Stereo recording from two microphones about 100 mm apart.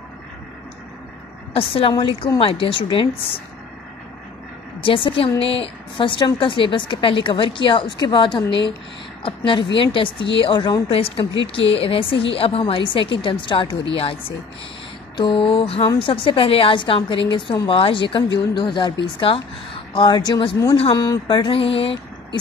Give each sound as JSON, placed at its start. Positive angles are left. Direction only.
{"t": 1.5, "sound": "a woman's voice", "side_deg": 70}
{"t": 4.8, "sound": "a woman's voice", "side_deg": 60}
{"t": 15.1, "sound": "a woman's voice", "side_deg": 50}
{"t": 21.4, "sound": "speech", "side_deg": 65}